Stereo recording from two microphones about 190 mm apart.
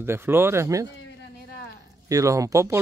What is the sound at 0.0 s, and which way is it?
Speech, 10° right (ahead or behind).